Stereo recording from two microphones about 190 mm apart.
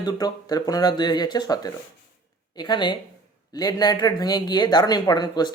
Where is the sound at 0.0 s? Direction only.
20° left (ahead or behind).